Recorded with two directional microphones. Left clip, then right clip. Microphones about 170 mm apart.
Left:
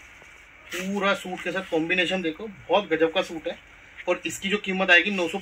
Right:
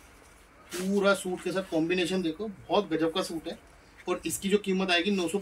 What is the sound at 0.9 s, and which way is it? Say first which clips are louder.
Speech: even; 35° left (ahead or behind).